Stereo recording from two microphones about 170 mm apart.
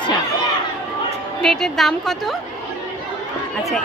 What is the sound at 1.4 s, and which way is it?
Speech, centre (ahead or behind).